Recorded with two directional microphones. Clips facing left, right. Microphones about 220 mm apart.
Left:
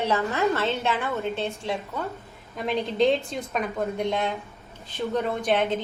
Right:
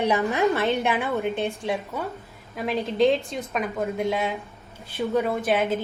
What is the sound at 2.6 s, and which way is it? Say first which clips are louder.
A woman's voice: right 1 dB; centre (ahead or behind).